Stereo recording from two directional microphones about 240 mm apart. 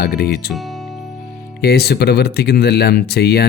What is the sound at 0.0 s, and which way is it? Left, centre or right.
Speech, left.